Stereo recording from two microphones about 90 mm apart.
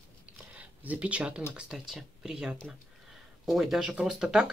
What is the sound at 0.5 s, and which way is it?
Speech, 15° right (ahead or behind).